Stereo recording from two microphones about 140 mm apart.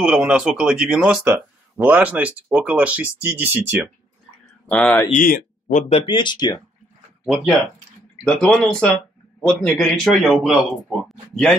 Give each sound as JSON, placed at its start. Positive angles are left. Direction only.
{"t": 0.0, "sound": "speech", "side_deg": -10}
{"t": 4.6, "sound": "a man's voice", "side_deg": 5}
{"t": 5.1, "sound": "speech", "side_deg": 70}
{"t": 5.9, "sound": "speech", "side_deg": 40}
{"t": 7.2, "sound": "a man's voice", "side_deg": 0}